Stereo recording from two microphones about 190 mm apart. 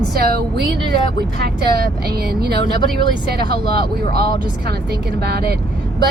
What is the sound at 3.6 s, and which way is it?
Speech, 55° right (ahead or behind).